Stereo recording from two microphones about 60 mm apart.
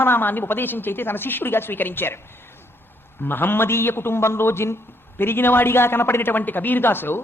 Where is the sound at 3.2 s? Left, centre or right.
Left.